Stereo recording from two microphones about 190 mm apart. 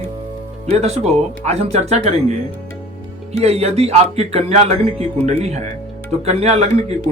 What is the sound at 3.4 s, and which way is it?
Speech, 35° right (ahead or behind).